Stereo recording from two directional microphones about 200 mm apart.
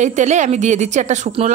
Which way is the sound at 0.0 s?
35° right (ahead or behind).